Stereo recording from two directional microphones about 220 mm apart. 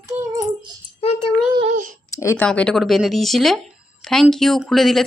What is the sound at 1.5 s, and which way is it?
Child singing, 30° right (ahead or behind).